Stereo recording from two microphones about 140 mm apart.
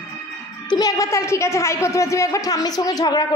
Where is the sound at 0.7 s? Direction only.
25° left (ahead or behind).